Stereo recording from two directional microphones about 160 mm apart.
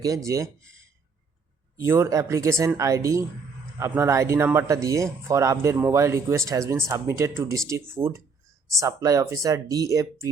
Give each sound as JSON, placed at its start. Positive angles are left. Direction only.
{"t": 0.3, "sound": "a woman's voice", "side_deg": -20}
{"t": 1.7, "sound": "a woman's voice", "side_deg": -15}